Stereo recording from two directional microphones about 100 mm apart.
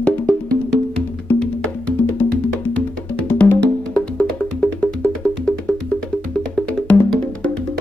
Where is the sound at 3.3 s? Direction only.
10° left (ahead or behind).